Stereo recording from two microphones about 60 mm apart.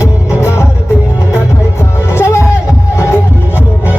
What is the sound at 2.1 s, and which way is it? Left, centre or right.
Music, left.